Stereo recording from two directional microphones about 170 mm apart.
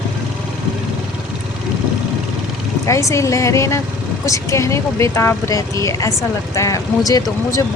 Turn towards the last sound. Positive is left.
turn(degrees=20)  # may be behind; listen again after turning